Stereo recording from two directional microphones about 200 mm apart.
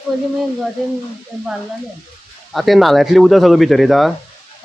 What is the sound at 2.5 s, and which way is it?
Speech, centre (ahead or behind).